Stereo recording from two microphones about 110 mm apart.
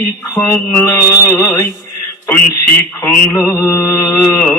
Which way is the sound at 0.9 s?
25° left (ahead or behind).